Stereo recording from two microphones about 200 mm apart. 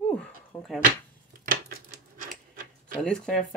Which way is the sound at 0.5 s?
10° left (ahead or behind).